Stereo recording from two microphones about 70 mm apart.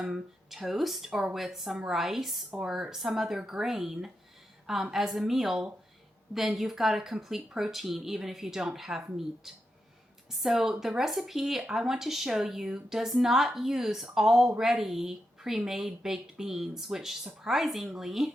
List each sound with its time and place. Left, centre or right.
0.0 s speech: centre
10.4 s speech: centre